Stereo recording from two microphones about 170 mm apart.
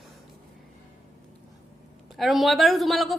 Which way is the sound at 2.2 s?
Centre (ahead or behind).